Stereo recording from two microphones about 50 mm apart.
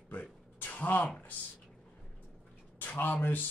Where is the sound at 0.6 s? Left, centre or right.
Left.